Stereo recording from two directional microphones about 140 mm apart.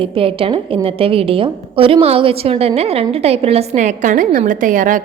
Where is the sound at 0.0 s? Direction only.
40° right (ahead or behind).